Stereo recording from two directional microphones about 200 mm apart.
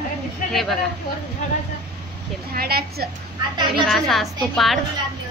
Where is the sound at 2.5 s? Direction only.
50° right (ahead or behind).